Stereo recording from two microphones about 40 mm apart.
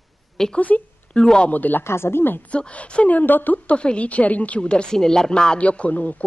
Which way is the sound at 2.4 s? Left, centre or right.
Left.